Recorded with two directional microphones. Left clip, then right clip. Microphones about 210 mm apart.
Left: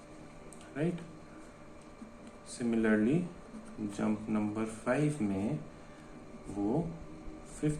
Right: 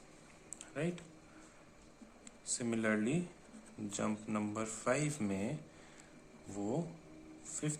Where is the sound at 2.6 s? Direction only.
45° right (ahead or behind).